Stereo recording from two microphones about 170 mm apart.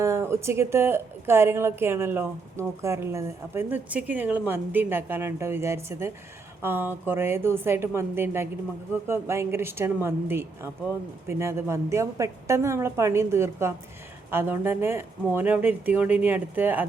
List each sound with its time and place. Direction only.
0.0 s a woman's voice: 15° right (ahead or behind)